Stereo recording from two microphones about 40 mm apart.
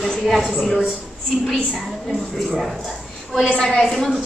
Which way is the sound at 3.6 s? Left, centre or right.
Centre.